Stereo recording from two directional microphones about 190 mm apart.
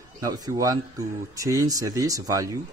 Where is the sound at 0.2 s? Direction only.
20° right (ahead or behind).